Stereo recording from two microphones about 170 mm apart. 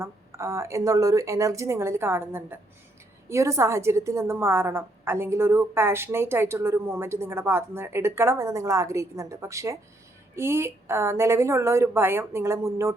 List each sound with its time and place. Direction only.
0.0 s a woman's voice: 15° right (ahead or behind)